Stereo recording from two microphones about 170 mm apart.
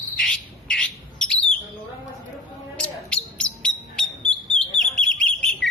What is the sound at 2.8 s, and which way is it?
Bird, 5° left (ahead or behind).